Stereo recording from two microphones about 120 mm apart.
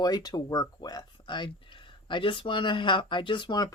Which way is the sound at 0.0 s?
35° left (ahead or behind).